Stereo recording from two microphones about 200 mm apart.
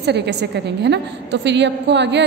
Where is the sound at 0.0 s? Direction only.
55° right (ahead or behind).